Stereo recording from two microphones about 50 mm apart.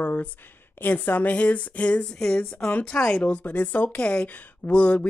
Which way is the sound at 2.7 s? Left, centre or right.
Left.